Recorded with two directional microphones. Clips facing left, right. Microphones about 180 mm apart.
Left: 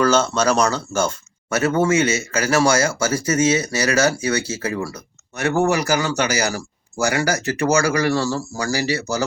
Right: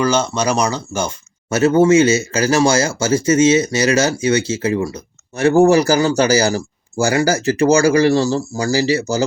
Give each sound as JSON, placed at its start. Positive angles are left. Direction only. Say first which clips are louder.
{"t": 0.0, "sound": "speech", "louder": "even", "side_deg": -15}
{"t": 1.5, "sound": "speech", "louder": "right 6 dB", "side_deg": -25}